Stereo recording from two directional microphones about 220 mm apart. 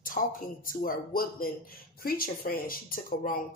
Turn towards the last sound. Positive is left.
turn(degrees=40)  # may be behind; listen again after turning